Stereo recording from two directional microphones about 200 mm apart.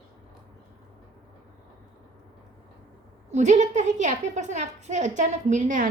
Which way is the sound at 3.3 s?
35° right (ahead or behind).